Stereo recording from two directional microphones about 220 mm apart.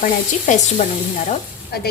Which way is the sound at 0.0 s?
35° left (ahead or behind).